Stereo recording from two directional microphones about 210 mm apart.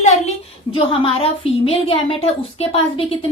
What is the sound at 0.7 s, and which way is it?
A woman's voice, 25° left (ahead or behind).